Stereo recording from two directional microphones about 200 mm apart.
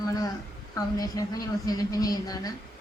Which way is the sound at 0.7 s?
15° left (ahead or behind).